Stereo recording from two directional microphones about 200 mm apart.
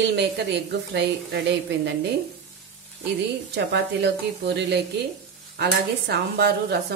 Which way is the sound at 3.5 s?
55° right (ahead or behind).